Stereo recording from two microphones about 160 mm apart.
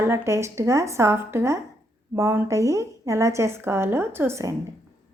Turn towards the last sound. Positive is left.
turn(degrees=-20)  # may be behind; listen again after turning